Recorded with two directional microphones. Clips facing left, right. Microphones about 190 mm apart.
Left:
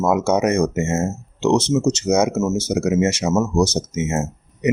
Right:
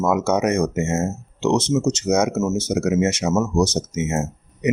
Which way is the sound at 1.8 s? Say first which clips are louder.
Left 2 dB; 25° left (ahead or behind).